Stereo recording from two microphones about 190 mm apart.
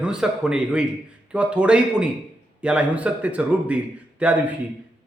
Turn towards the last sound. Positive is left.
turn(degrees=-5)  # may be behind; listen again after turning